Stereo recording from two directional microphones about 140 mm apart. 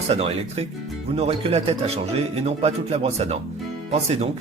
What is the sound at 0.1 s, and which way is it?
Speech, 45° right (ahead or behind).